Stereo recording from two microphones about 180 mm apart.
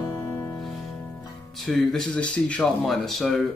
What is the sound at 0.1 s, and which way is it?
Music, 15° left (ahead or behind).